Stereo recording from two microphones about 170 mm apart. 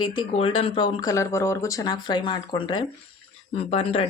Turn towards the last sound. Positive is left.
turn(degrees=35)  # may be behind; listen again after turning